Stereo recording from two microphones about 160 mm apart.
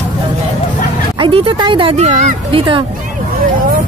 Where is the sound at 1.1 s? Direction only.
35° right (ahead or behind).